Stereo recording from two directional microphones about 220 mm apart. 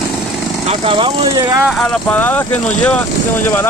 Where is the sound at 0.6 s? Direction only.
25° right (ahead or behind).